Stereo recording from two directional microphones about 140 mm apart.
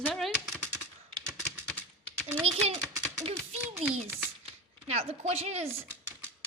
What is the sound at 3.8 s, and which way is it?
Speech, 15° right (ahead or behind).